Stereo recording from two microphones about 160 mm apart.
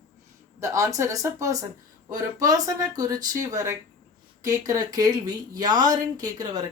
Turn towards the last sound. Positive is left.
turn(degrees=-25)  # may be behind; listen again after turning